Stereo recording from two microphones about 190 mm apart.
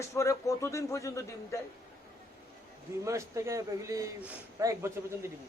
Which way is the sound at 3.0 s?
15° right (ahead or behind).